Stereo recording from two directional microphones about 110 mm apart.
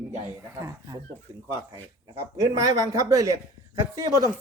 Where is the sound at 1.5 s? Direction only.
30° right (ahead or behind).